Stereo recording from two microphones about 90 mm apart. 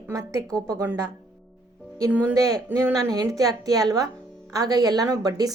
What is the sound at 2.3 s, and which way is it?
A woman's voice, 35° right (ahead or behind).